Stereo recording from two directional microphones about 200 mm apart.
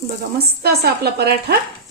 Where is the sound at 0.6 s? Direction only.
55° right (ahead or behind).